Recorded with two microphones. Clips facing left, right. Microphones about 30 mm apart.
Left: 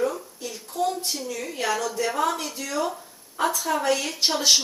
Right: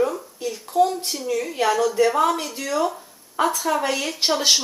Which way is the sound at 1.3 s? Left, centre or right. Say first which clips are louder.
Right 7 dB; centre.